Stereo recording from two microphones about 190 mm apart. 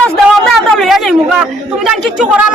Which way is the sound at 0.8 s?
Centre (ahead or behind).